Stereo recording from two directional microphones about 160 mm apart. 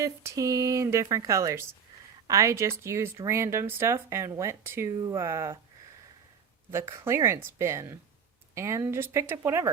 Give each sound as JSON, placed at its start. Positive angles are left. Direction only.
{"t": 0.0, "sound": "a woman's voice", "side_deg": -20}
{"t": 6.7, "sound": "a woman's voice", "side_deg": -15}